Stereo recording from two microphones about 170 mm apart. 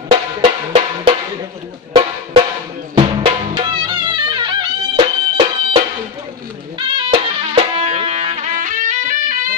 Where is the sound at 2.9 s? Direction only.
30° right (ahead or behind).